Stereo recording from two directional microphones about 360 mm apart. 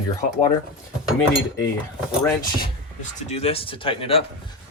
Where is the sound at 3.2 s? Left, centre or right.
Centre.